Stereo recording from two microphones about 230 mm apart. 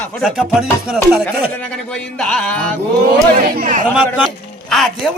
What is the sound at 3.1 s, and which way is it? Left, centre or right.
Speech, right.